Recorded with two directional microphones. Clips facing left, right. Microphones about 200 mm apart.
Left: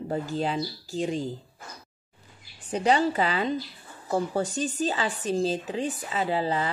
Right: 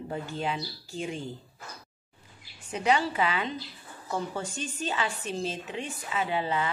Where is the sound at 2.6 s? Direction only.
35° left (ahead or behind).